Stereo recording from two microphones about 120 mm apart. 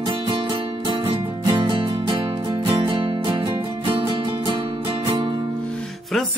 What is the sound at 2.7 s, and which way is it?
Music, 50° right (ahead or behind).